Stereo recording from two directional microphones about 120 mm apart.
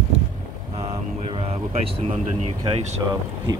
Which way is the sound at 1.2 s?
50° right (ahead or behind).